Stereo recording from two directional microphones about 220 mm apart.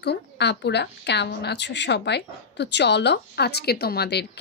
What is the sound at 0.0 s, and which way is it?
A woman's voice, 50° left (ahead or behind).